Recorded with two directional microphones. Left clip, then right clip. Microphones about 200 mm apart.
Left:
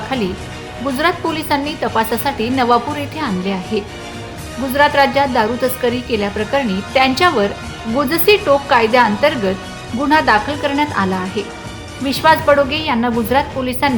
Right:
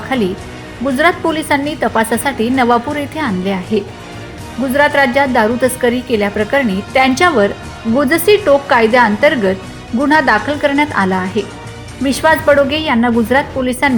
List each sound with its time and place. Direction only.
0.1 s a woman's voice: 15° right (ahead or behind)